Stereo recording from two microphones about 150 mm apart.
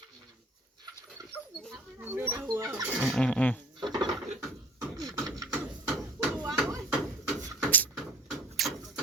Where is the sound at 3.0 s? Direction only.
5° left (ahead or behind).